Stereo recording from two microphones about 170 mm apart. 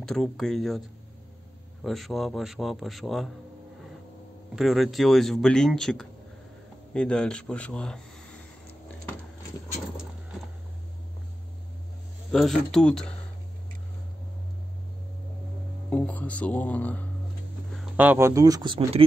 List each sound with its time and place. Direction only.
0.0 s speech: centre (ahead or behind)
4.6 s speech: centre (ahead or behind)
12.3 s speech: centre (ahead or behind)
15.9 s speech: 10° left (ahead or behind)
17.9 s speech: 10° right (ahead or behind); by 19.0 s 30° right (ahead or behind)